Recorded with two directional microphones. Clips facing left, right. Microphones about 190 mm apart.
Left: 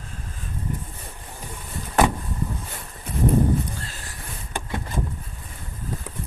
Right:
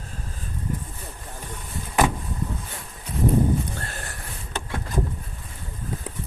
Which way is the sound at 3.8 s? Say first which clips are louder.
Right 3 dB; 60° right (ahead or behind).